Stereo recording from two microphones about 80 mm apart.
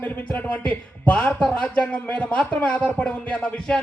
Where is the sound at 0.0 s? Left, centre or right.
Centre.